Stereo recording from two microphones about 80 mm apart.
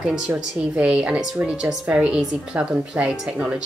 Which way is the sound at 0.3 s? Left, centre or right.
Centre.